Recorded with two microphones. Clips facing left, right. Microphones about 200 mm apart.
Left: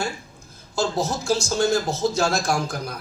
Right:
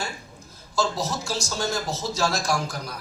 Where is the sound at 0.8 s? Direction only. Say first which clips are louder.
Left 2 dB; 50° left (ahead or behind).